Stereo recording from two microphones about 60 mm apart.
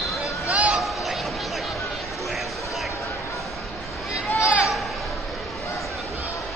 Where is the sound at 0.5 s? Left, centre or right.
Right.